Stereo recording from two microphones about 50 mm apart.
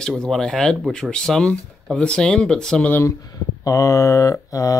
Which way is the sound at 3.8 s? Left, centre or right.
Left.